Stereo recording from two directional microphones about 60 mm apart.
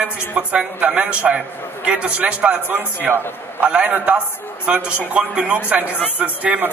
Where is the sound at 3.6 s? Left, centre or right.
Right.